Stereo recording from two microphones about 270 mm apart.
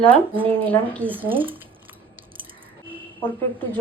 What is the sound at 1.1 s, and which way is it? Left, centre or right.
Speech, centre.